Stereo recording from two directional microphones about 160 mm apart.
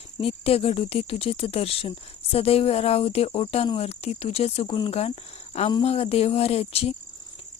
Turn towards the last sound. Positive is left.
turn(degrees=40)  # may be behind; listen again after turning